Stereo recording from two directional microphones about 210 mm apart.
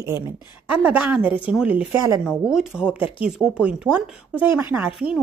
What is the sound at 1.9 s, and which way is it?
Speech, 15° right (ahead or behind).